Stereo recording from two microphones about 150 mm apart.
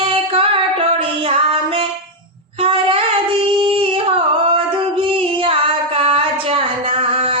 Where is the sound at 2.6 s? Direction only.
40° right (ahead or behind).